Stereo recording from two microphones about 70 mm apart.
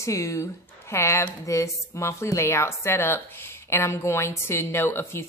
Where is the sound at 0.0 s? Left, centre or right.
Left.